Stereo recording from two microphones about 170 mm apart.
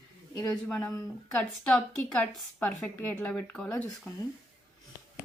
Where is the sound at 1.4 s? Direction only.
5° left (ahead or behind).